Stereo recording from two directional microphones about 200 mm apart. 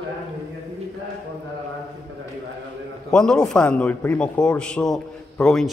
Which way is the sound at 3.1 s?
5° left (ahead or behind).